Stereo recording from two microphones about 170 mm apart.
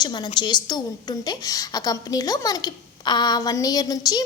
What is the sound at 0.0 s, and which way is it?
A woman's voice, 25° left (ahead or behind).